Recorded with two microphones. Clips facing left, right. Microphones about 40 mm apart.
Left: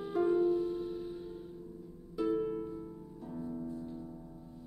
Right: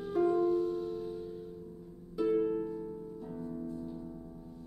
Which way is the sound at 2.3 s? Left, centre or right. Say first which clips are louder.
Right 4 dB; centre.